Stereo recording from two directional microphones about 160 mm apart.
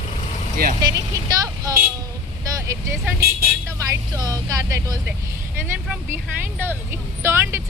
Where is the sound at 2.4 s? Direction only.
20° right (ahead or behind).